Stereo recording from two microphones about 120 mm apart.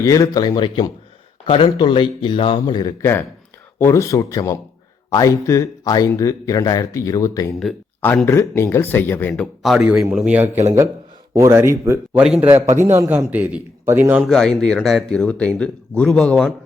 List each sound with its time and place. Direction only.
0.0 s speech: 30° left (ahead or behind)
1.5 s speech: 50° left (ahead or behind)
3.0 s speech: 20° left (ahead or behind)
8.0 s speech: 15° left (ahead or behind)
9.3 s a man's voice: 5° left (ahead or behind); by 14.3 s 15° right (ahead or behind)
14.3 s speech: 5° left (ahead or behind)